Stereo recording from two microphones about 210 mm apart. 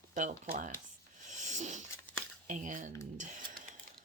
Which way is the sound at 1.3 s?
35° right (ahead or behind).